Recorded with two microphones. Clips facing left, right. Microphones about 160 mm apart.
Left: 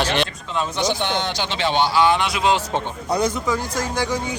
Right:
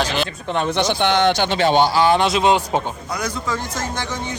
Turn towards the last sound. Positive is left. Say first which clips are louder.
# left 3 dB
turn(degrees=10)  # may be behind; listen again after turning